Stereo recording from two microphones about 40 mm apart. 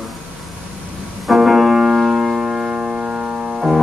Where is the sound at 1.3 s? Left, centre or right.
Centre.